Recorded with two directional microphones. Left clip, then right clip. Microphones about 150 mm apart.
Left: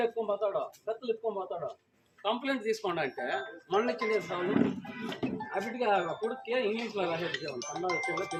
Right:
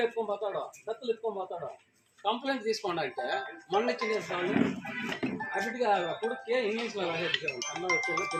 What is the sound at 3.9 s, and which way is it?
Speech, 35° right (ahead or behind).